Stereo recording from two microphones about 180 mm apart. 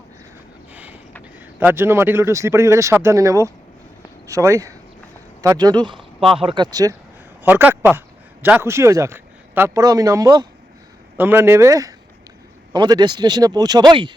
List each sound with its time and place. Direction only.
0.7 s a sound: 10° right (ahead or behind)
1.5 s speech: 10° right (ahead or behind)
7.4 s speech: 10° right (ahead or behind); by 14.1 s 25° right (ahead or behind)